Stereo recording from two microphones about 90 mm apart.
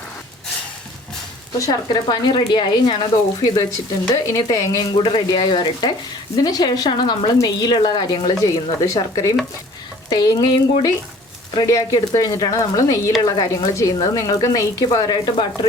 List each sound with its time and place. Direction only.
1.5 s speech: 45° left (ahead or behind)
4.1 s speech: 40° left (ahead or behind)
4.9 s speech: 60° left (ahead or behind); by 13.1 s 35° left (ahead or behind)
13.2 s speech: 50° left (ahead or behind)